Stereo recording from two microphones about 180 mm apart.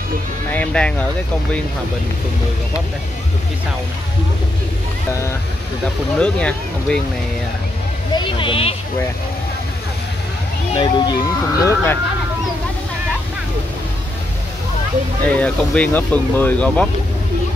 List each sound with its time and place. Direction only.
0.5 s speech: 5° left (ahead or behind)
6.1 s speech: 5° left (ahead or behind)
8.2 s speech: 30° left (ahead or behind)
10.8 s speech: 20° left (ahead or behind)
15.2 s speech: 5° left (ahead or behind)